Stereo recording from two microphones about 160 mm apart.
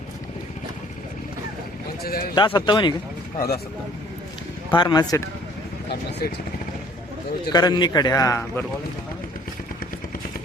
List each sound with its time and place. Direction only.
2.0 s speech: 70° left (ahead or behind)
2.3 s a man's voice: 30° left (ahead or behind)
3.3 s speech: 80° left
4.7 s a man's voice: 25° left (ahead or behind)
5.9 s speech: 90° left
7.5 s a man's voice: 25° left (ahead or behind)